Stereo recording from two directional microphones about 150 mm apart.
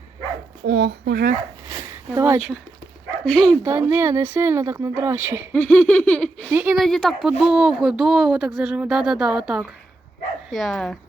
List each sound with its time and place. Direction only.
0.6 s speech: 90° right
1.1 s speech: 75° right (ahead or behind)
1.7 s a sound: 20° right (ahead or behind)
3.2 s baby laughter: 5° left (ahead or behind)
3.6 s speech: 15° right (ahead or behind)
5.5 s baby laughter: 10° left (ahead or behind)
6.5 s speech: 15° right (ahead or behind)
6.7 s speech: centre (ahead or behind)